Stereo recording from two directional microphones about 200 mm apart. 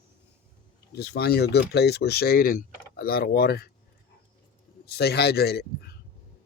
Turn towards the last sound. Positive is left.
turn(degrees=55)  # may be behind; listen again after turning